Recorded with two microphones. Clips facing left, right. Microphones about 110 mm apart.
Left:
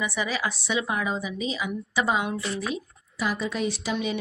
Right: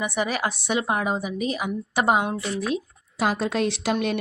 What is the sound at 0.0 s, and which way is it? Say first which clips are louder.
A woman's voice: right 3 dB; 55° right (ahead or behind).